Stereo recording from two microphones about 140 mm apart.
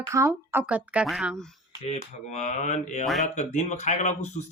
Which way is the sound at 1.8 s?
50° left (ahead or behind).